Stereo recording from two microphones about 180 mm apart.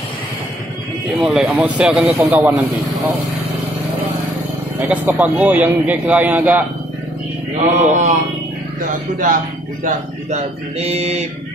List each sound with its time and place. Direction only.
1.2 s a man's voice: centre (ahead or behind)
4.7 s a man's voice: 10° right (ahead or behind)
7.6 s speech: 40° right (ahead or behind)
9.8 s speech: 40° right (ahead or behind)